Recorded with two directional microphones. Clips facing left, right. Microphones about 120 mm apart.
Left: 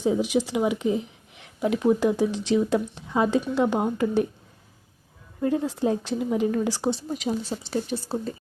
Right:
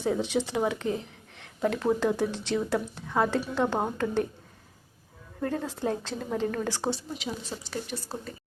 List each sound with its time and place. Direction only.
0.0 s speech: 15° left (ahead or behind)
5.4 s speech: 15° left (ahead or behind)
7.1 s speech: 40° left (ahead or behind)
7.4 s speech: 30° left (ahead or behind)